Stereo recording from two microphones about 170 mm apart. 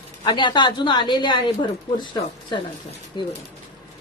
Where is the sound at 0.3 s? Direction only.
25° left (ahead or behind).